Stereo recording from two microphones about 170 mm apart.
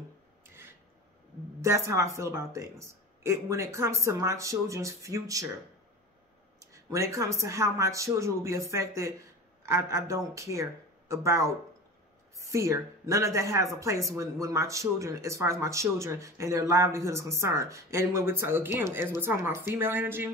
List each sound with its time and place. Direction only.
1.6 s speech: 15° right (ahead or behind)
6.6 s speech: 15° right (ahead or behind)